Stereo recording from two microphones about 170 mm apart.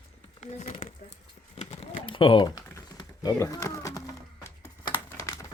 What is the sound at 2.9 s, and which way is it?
Speech, 20° left (ahead or behind).